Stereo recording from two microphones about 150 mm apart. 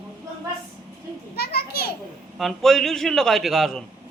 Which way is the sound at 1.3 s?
90° left.